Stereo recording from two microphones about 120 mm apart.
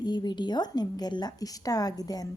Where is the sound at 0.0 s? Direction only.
35° left (ahead or behind).